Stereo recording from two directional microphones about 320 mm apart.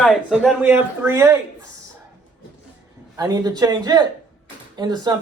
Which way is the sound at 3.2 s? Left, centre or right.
Centre.